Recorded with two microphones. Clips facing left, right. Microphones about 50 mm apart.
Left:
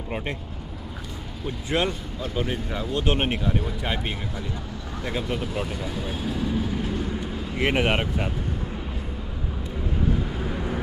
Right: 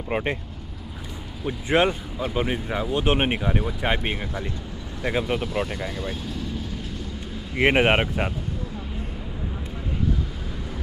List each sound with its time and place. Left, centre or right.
0.1 s speech: right
1.7 s speech: right
5.4 s speech: centre
7.5 s speech: right
10.4 s vehicle: left